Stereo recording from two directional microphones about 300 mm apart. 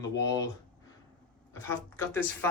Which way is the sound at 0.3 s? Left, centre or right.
Centre.